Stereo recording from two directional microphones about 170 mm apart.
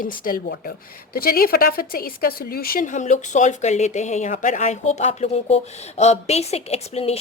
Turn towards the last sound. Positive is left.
turn(degrees=35)  # may be behind; listen again after turning